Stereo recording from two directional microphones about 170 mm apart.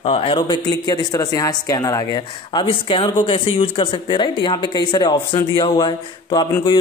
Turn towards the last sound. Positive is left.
turn(degrees=25)  # may be behind; listen again after turning